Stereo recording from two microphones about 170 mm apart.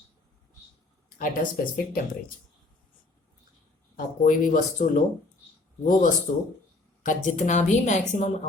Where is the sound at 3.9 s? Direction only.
50° left (ahead or behind).